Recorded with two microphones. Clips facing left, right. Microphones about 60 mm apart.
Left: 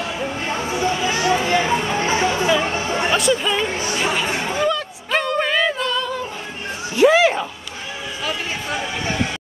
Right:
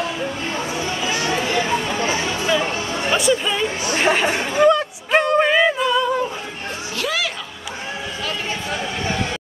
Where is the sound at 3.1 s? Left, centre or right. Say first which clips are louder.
Right 2 dB; centre.